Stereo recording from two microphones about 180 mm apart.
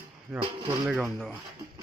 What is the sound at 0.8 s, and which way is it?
Speech, centre (ahead or behind).